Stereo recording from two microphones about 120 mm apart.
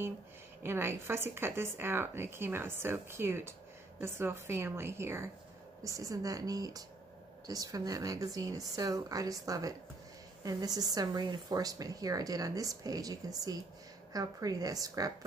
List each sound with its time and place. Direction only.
0.6 s speech: 20° right (ahead or behind)